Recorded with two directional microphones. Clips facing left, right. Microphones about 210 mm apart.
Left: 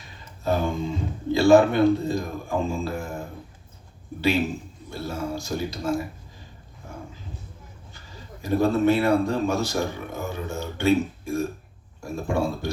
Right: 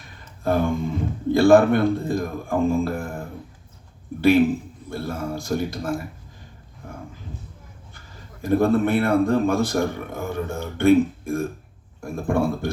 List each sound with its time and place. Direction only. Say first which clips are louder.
0.4 s speech: right 3 dB; 55° right (ahead or behind)
4.2 s speech: right 7 dB; 55° right (ahead or behind)
7.9 s speech: left 3 dB; 55° right (ahead or behind)